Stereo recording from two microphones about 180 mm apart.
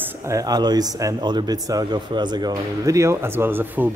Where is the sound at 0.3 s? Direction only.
20° right (ahead or behind).